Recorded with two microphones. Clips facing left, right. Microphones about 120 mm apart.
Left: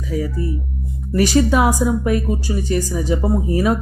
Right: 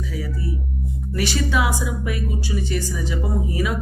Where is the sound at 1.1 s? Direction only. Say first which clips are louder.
Left 8 dB; 45° left (ahead or behind).